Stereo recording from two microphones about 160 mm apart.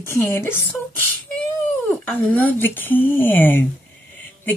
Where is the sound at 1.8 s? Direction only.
10° left (ahead or behind).